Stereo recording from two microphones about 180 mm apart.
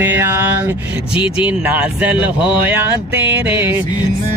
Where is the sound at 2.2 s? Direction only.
25° left (ahead or behind).